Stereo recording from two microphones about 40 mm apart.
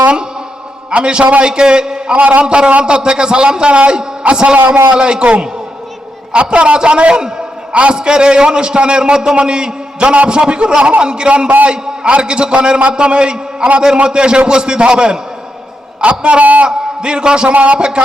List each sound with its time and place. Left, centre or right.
0.9 s a man's voice: right
2.1 s a man's voice: right
4.5 s a man's voice: right
4.9 s a man's voice: right
16.6 s a man's voice: right
17.5 s a man's voice: right
17.7 s a man's voice: right